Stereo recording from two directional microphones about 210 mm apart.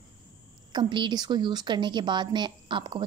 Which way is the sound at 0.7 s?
20° right (ahead or behind).